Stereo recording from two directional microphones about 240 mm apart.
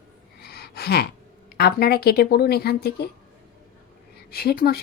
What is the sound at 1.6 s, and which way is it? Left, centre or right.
A woman's voice, left.